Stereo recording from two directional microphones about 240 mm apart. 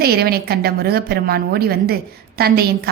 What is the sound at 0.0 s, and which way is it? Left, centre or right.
A woman's voice, right.